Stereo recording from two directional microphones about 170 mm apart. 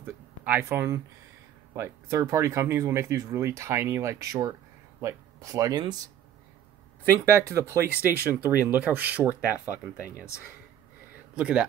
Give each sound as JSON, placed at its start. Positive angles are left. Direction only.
{"t": 0.0, "sound": "a sound", "side_deg": -10}
{"t": 1.7, "sound": "speech", "side_deg": -15}
{"t": 7.2, "sound": "speech", "side_deg": -15}
{"t": 11.3, "sound": "speech", "side_deg": -5}